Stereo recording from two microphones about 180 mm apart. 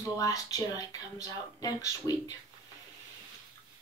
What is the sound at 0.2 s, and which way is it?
Speech, 20° left (ahead or behind).